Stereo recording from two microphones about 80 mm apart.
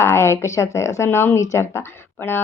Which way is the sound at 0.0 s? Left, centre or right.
Left.